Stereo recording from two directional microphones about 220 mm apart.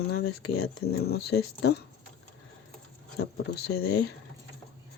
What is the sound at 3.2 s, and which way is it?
Speech, 45° left (ahead or behind).